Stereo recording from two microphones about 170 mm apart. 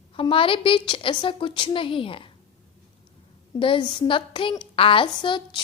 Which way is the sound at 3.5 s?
30° left (ahead or behind).